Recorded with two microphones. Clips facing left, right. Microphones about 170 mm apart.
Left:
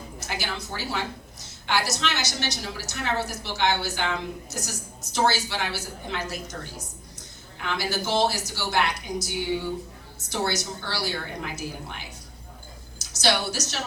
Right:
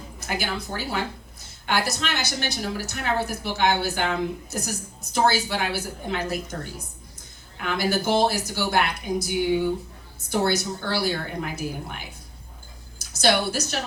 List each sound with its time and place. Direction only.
0.3 s a woman's voice: 50° right (ahead or behind)
5.1 s a woman's voice: 55° right (ahead or behind)
13.2 s a woman's voice: 55° right (ahead or behind)